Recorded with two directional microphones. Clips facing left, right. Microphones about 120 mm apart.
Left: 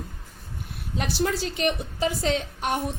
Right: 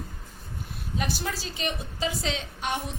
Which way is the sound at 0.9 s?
55° left (ahead or behind).